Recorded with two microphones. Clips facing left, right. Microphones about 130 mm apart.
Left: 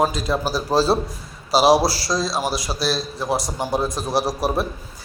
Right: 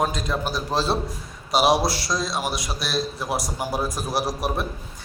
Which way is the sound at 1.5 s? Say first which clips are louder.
Left 4 dB; 30° left (ahead or behind).